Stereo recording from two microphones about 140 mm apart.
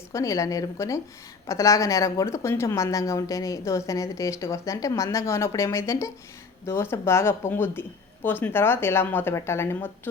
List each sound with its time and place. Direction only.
0.1 s a woman's voice: 25° left (ahead or behind)